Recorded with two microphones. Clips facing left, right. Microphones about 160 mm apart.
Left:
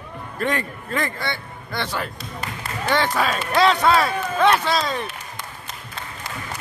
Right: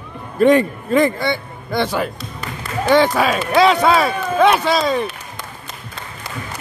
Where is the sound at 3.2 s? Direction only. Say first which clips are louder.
Right 5 dB; 10° right (ahead or behind).